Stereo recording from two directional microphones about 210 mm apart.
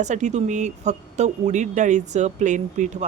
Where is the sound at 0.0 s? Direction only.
35° right (ahead or behind).